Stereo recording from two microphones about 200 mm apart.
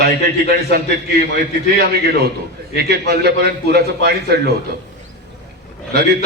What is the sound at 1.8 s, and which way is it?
A man's voice, 50° right (ahead or behind).